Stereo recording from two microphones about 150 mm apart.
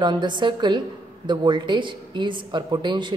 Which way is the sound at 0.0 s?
30° right (ahead or behind).